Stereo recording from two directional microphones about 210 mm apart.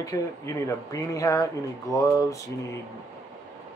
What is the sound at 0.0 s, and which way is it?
Speech, 15° left (ahead or behind).